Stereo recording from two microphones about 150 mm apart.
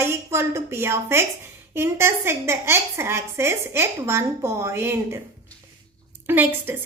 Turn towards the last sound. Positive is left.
turn(degrees=-15)  # may be behind; listen again after turning